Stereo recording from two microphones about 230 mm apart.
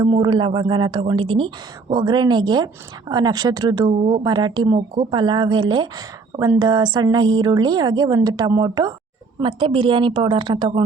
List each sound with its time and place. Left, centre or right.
0.0 s a woman's voice: centre